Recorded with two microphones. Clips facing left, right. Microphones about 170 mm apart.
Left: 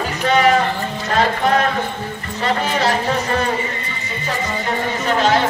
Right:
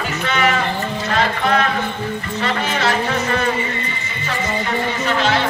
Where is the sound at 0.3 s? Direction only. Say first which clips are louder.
Left 5 dB; 35° left (ahead or behind).